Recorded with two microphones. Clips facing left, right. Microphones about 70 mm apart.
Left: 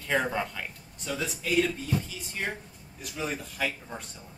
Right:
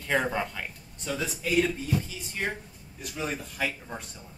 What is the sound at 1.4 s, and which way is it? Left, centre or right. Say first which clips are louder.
A man's voice: right 1 dB; centre.